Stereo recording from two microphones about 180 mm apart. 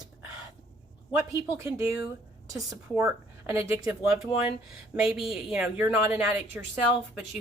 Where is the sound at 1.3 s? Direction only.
15° right (ahead or behind).